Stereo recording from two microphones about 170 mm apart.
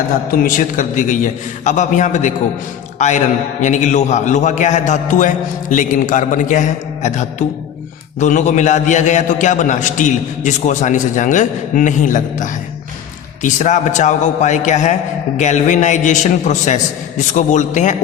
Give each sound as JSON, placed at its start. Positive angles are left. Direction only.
{"t": 0.3, "sound": "a man's voice", "side_deg": 50}